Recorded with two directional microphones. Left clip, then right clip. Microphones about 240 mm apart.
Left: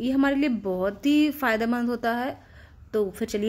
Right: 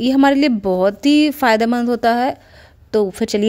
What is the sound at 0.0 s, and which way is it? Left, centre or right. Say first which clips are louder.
A woman's voice: right 10 dB; right.